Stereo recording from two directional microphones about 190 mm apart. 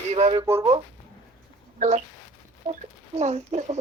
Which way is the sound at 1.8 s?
35° right (ahead or behind).